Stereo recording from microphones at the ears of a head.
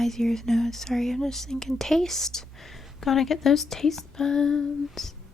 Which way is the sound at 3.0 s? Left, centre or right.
Left.